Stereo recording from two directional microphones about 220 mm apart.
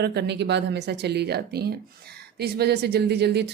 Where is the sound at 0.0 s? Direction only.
50° right (ahead or behind).